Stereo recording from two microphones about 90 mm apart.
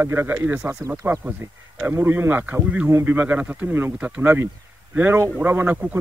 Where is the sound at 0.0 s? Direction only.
25° right (ahead or behind).